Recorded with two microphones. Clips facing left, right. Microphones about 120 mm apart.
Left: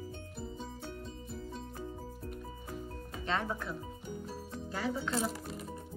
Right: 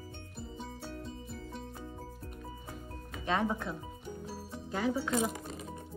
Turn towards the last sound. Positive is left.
turn(degrees=0)  # may be behind; listen again after turning